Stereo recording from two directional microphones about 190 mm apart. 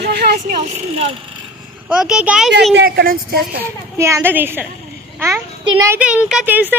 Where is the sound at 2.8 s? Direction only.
55° right (ahead or behind).